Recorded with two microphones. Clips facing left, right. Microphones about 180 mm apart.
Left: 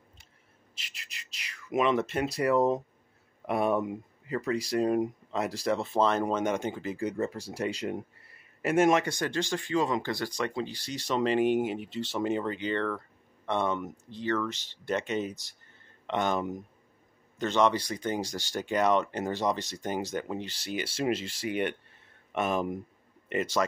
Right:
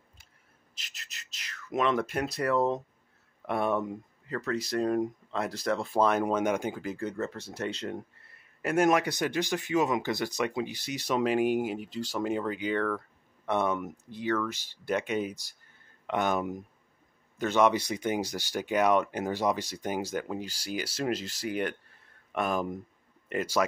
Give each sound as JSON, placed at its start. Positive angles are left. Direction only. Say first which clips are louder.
{"t": 1.4, "sound": "speech", "louder": "left 1 dB", "side_deg": 5}
{"t": 2.5, "sound": "speech", "louder": "left 2 dB", "side_deg": 10}
{"t": 6.0, "sound": "speech", "louder": "right 2 dB", "side_deg": -10}
{"t": 7.0, "sound": "speech", "louder": "left 2 dB", "side_deg": 15}
{"t": 9.2, "sound": "speech", "louder": "right 1 dB", "side_deg": -15}
{"t": 18.2, "sound": "speech", "louder": "right 1 dB", "side_deg": 15}
{"t": 18.5, "sound": "speech", "louder": "right 1 dB", "side_deg": -5}